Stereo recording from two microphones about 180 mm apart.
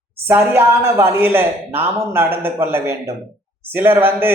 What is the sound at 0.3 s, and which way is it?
Speech, 10° right (ahead or behind).